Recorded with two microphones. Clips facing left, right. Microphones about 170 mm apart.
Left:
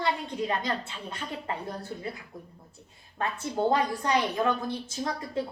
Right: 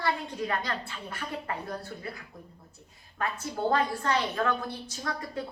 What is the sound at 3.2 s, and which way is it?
A woman's voice, 20° left (ahead or behind).